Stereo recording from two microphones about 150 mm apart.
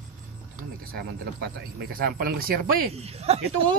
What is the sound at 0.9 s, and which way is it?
Speech, 85° right.